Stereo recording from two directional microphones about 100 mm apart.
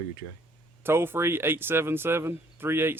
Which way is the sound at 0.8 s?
25° right (ahead or behind).